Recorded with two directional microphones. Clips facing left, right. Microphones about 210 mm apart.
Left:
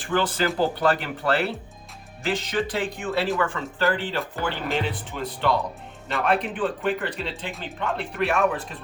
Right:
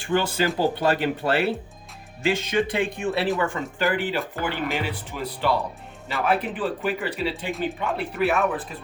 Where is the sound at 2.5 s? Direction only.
15° right (ahead or behind).